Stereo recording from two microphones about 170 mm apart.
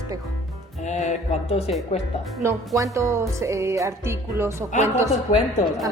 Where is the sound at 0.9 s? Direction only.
45° left (ahead or behind).